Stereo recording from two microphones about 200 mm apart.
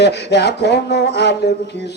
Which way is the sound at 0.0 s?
55° left (ahead or behind).